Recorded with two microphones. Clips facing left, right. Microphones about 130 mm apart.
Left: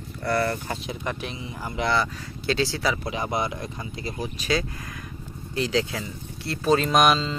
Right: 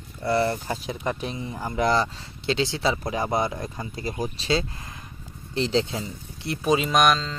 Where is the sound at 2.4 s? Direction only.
20° right (ahead or behind); by 4.5 s 40° right (ahead or behind).